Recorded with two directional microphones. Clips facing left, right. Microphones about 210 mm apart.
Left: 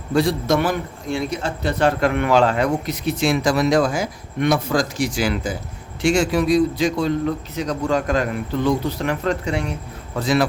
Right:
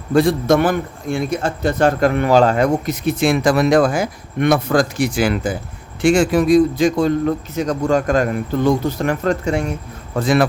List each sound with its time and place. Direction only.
0.1 s a man's voice: 50° right (ahead or behind)